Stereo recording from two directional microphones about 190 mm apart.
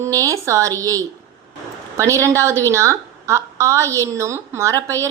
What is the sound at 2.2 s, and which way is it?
Speech, 15° right (ahead or behind).